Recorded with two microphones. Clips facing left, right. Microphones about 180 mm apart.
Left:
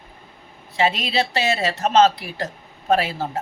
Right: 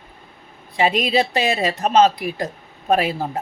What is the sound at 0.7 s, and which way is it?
Speech, 15° right (ahead or behind).